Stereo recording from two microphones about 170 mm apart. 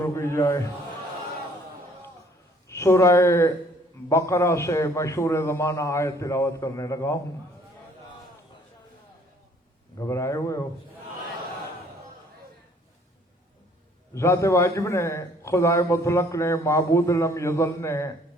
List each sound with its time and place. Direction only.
0.0 s a man's voice: 15° left (ahead or behind)
2.6 s a man's voice: 15° left (ahead or behind)
10.0 s a man's voice: 15° left (ahead or behind)
14.1 s a man's voice: 15° left (ahead or behind)